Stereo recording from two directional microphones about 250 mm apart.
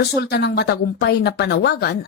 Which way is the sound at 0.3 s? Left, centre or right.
Left.